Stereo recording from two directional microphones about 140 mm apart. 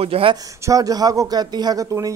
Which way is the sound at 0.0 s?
40° right (ahead or behind).